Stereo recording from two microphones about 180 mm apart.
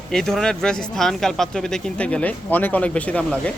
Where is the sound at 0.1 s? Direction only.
Centre (ahead or behind).